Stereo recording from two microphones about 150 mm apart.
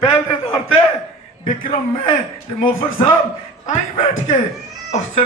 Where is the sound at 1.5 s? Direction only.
60° left (ahead or behind).